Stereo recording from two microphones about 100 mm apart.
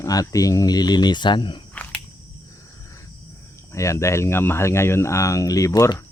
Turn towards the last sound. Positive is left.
turn(degrees=30)  # may be behind; listen again after turning